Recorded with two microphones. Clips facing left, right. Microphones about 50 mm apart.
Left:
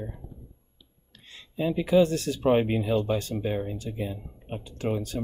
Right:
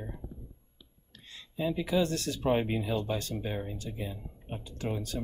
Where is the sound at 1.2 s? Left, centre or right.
Left.